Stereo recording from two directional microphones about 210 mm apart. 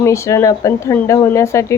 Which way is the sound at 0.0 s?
15° left (ahead or behind).